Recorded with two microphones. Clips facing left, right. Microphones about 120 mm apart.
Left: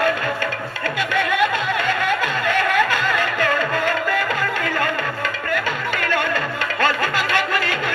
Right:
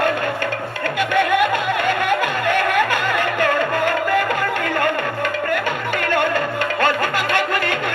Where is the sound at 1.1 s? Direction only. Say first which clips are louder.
Right 3 dB; 55° right (ahead or behind).